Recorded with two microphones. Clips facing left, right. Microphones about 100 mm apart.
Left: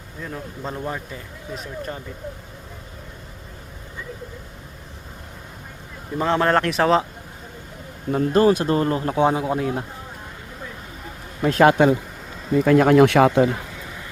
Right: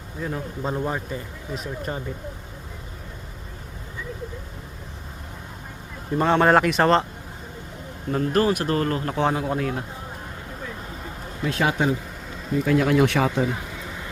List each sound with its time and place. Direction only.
0.2 s speech: 5° right (ahead or behind)
6.1 s speech: centre (ahead or behind)
8.1 s speech: 25° left (ahead or behind)
11.4 s speech: 50° left (ahead or behind)
11.7 s speech: 65° left (ahead or behind)
12.6 s speech: 50° left (ahead or behind)